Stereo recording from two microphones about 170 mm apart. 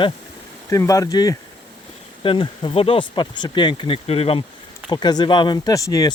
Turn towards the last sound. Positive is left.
turn(degrees=20)  # may be behind; listen again after turning